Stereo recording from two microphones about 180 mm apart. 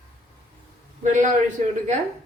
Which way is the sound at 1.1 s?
45° right (ahead or behind).